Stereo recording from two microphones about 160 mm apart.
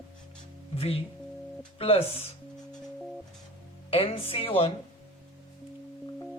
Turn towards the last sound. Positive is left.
turn(degrees=35)  # may be behind; listen again after turning